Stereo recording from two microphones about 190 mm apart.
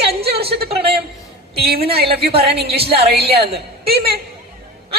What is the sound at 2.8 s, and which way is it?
Speech, 30° right (ahead or behind).